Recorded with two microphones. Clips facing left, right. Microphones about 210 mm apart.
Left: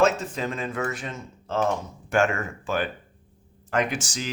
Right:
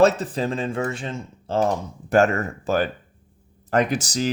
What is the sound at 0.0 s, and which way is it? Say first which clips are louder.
Speech: right 4 dB; 35° right (ahead or behind).